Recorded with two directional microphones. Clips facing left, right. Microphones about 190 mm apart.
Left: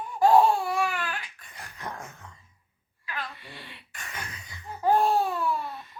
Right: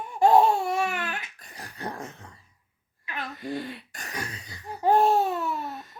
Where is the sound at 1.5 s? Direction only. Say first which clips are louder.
Right 3 dB; 35° right (ahead or behind).